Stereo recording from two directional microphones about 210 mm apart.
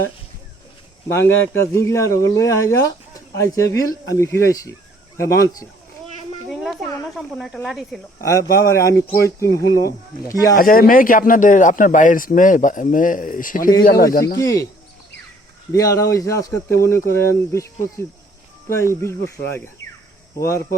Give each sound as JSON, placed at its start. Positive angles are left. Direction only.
{"t": 1.0, "sound": "speech", "side_deg": 10}
{"t": 6.5, "sound": "a sound", "side_deg": 0}
{"t": 7.2, "sound": "speech", "side_deg": 0}
{"t": 8.6, "sound": "speech", "side_deg": 15}
{"t": 10.6, "sound": "a man's voice", "side_deg": 40}
{"t": 14.3, "sound": "speech", "side_deg": 15}
{"t": 15.7, "sound": "speech", "side_deg": 15}